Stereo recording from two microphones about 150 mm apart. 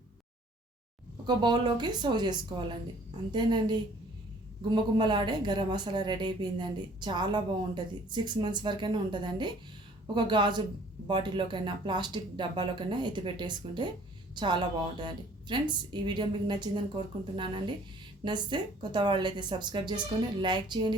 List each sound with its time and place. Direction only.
1.3 s a woman's voice: 30° right (ahead or behind)